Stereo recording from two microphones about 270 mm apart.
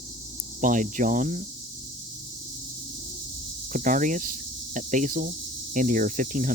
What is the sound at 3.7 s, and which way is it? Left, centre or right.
Speech, right.